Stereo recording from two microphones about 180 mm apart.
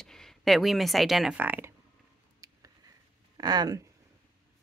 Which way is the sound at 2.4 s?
20° right (ahead or behind).